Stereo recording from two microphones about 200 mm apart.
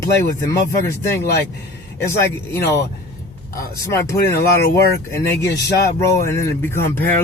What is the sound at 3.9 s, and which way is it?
A man's voice, 15° left (ahead or behind).